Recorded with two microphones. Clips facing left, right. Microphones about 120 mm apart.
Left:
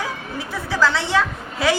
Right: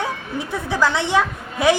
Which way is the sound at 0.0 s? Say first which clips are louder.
Right 3 dB; 20° right (ahead or behind).